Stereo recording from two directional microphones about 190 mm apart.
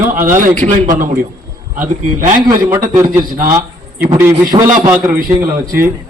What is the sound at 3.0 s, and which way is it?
A man's voice, 20° right (ahead or behind).